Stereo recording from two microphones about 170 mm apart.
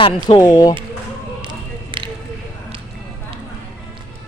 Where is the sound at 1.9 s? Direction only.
30° right (ahead or behind).